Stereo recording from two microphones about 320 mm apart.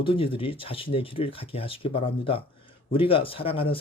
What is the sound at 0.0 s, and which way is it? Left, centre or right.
Speech, centre.